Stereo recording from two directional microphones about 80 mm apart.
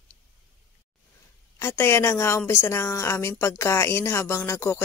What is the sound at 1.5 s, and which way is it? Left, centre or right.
Speech, left.